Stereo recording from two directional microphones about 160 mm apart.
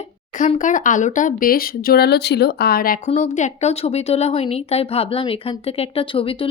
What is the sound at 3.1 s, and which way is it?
Speech, 45° left (ahead or behind).